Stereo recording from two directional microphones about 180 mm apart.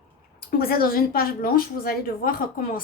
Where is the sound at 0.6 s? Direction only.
55° left (ahead or behind).